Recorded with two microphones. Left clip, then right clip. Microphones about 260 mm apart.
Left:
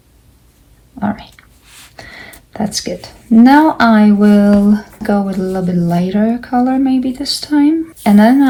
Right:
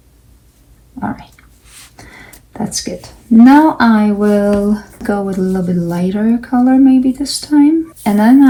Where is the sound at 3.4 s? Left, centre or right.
Left.